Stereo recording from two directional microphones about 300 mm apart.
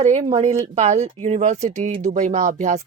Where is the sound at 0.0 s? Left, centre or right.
Right.